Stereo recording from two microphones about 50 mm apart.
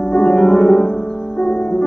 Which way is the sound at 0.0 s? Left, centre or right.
Left.